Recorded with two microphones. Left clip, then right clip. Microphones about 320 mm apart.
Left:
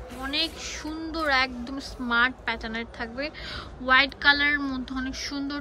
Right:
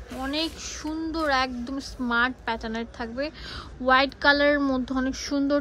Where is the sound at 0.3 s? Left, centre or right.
Centre.